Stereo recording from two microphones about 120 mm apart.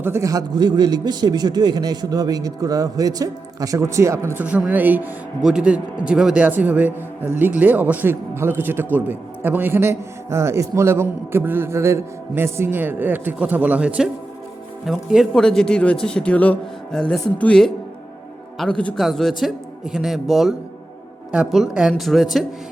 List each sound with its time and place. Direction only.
0.0 s a man's voice: 25° right (ahead or behind)
4.4 s a man's voice: 10° right (ahead or behind)